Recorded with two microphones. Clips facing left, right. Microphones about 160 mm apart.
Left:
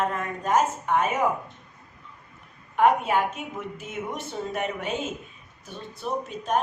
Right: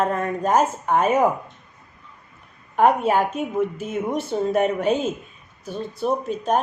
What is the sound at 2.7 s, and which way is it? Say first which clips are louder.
Speech: right 3 dB; 35° right (ahead or behind).